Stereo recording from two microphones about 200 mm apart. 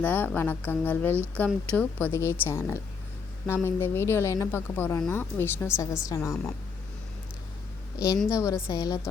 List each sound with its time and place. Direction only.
0.0 s a woman's voice: 10° left (ahead or behind)
7.9 s a woman's voice: 15° left (ahead or behind)